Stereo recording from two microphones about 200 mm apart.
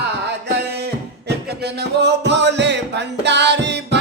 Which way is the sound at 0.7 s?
55° right (ahead or behind).